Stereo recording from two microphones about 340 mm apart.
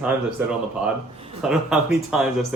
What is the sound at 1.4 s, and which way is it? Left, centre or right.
Speech, centre.